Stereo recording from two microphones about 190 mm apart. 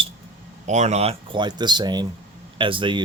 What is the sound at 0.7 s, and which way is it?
Speech, 35° right (ahead or behind).